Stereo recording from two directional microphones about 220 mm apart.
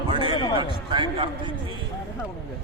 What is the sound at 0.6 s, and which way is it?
Speech, 20° right (ahead or behind).